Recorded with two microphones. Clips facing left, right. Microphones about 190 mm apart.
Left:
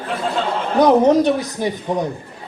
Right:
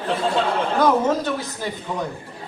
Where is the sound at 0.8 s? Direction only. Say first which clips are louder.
Left 8 dB; 20° left (ahead or behind).